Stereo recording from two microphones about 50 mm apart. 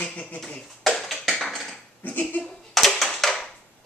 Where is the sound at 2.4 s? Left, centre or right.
Centre.